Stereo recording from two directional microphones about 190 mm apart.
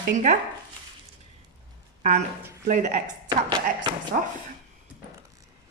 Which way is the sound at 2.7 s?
40° right (ahead or behind).